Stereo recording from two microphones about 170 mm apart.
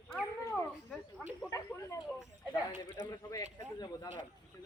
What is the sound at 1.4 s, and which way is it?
Snake, 15° left (ahead or behind).